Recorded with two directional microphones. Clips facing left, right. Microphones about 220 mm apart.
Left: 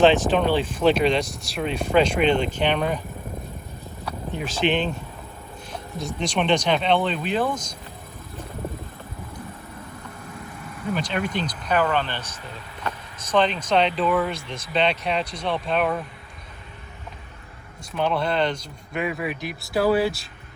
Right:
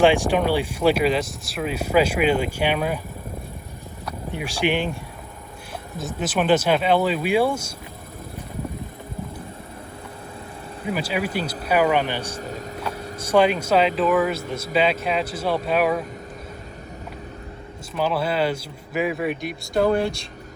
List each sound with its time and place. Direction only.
0.0 s speech: 10° right (ahead or behind)
4.3 s speech: 10° right (ahead or behind)
10.9 s speech: 5° right (ahead or behind)
12.4 s speech: 40° right (ahead or behind)
13.2 s speech: 10° right (ahead or behind)
17.9 s speech: 5° right (ahead or behind)